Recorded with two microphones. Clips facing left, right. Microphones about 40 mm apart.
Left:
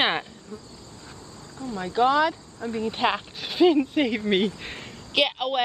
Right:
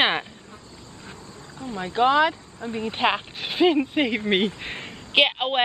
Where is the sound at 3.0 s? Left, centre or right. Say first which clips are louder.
Right 4 dB; centre; by 5.6 s right.